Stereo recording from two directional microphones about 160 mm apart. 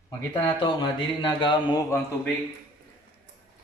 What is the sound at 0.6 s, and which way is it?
A man's voice, 30° left (ahead or behind).